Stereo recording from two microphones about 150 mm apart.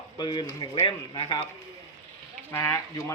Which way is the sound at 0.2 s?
30° left (ahead or behind).